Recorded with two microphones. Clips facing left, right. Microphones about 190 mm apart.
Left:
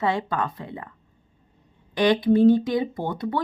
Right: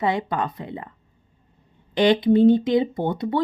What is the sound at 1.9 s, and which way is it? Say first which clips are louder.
Speech: right 2 dB; 25° right (ahead or behind).